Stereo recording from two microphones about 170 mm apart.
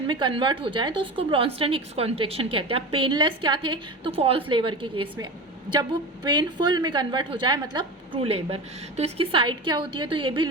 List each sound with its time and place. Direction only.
0.1 s a woman's voice: 30° right (ahead or behind)
6.2 s a woman's voice: 25° right (ahead or behind)